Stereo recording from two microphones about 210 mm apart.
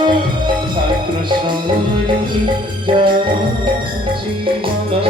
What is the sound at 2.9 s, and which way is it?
Music, 25° right (ahead or behind).